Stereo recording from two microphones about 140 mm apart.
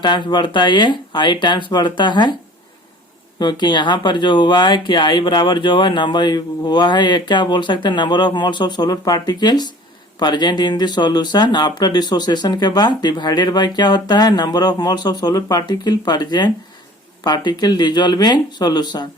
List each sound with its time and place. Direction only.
0.0 s speech: 35° left (ahead or behind)
3.3 s speech: 30° left (ahead or behind)